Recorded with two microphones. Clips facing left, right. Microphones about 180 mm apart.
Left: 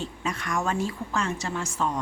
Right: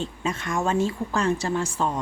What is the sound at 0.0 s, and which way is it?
A woman's voice, 25° right (ahead or behind).